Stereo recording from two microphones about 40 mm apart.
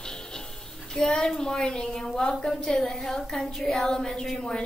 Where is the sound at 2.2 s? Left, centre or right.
Centre.